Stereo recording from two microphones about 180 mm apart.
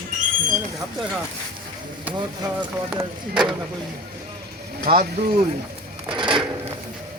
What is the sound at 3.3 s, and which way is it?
Speech, 5° right (ahead or behind).